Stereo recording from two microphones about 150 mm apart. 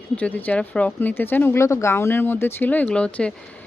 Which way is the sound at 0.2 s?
10° left (ahead or behind).